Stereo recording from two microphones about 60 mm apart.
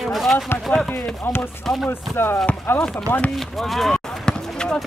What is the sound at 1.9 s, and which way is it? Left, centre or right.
Chopping, left.